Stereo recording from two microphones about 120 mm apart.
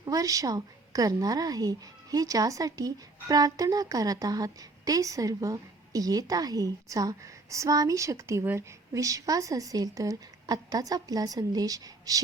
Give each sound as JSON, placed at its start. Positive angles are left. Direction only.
{"t": 0.0, "sound": "a woman's voice", "side_deg": -30}